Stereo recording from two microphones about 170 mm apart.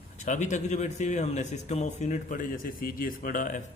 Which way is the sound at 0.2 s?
45° left (ahead or behind).